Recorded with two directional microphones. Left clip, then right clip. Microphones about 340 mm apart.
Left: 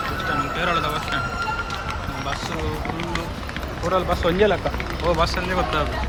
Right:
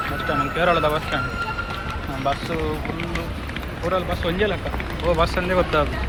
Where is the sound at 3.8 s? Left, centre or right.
Centre.